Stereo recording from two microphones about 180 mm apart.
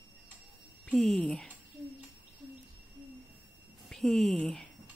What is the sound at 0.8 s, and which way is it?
Speech, centre (ahead or behind).